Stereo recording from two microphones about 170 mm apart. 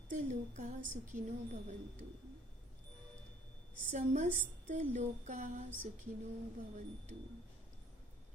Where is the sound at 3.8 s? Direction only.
50° right (ahead or behind).